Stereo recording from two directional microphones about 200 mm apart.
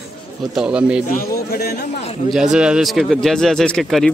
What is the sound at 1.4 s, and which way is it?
Speech, 50° left (ahead or behind).